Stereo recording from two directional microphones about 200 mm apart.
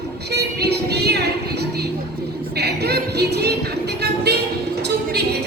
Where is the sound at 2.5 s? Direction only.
55° right (ahead or behind).